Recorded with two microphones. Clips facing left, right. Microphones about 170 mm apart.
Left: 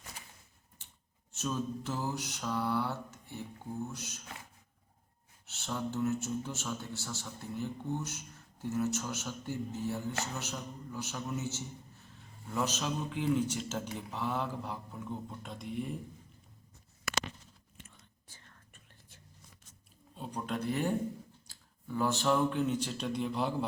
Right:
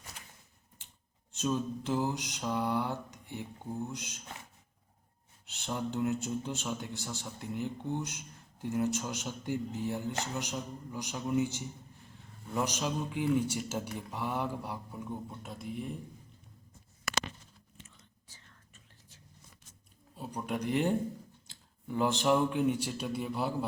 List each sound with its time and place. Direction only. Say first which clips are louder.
1.3 s speech: right 3 dB; 15° right (ahead or behind)
5.5 s a man's voice: right 1 dB; 15° right (ahead or behind); by 16.0 s centre (ahead or behind)
17.7 s whispering: even; 55° left (ahead or behind)
20.1 s speech: right 1 dB; 5° right (ahead or behind)